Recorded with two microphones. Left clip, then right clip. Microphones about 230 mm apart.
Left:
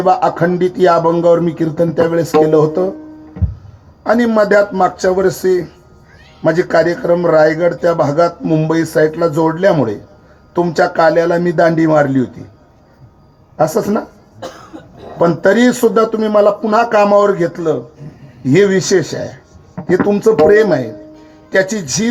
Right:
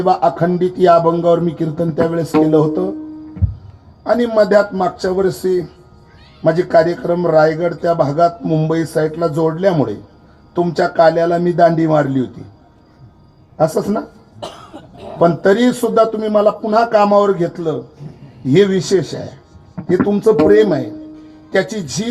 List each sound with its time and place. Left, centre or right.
0.0 s a man's voice: left
4.0 s a man's voice: left
13.6 s speech: left
15.2 s a man's voice: left